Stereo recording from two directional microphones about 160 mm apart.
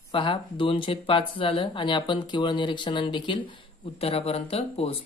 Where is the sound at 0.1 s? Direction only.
35° left (ahead or behind).